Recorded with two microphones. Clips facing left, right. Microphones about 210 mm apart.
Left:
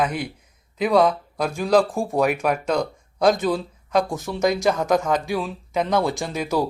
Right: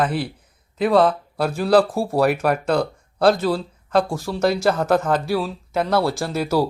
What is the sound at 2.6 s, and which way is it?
Speech, 10° left (ahead or behind).